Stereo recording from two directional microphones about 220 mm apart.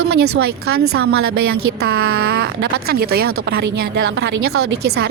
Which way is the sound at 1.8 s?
45° right (ahead or behind).